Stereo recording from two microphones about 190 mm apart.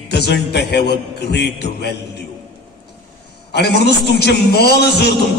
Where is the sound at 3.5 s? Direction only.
60° left (ahead or behind).